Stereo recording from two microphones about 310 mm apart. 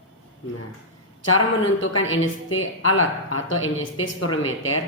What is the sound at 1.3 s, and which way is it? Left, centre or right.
A woman's voice, left.